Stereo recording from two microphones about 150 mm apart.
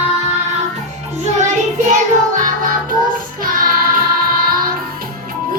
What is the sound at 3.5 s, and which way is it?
Music, 70° right (ahead or behind).